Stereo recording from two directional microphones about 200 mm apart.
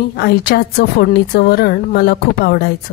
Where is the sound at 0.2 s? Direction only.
55° left (ahead or behind).